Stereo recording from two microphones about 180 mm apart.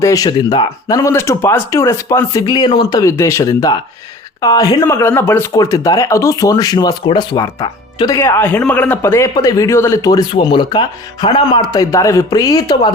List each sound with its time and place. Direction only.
0.0 s speech: 20° left (ahead or behind)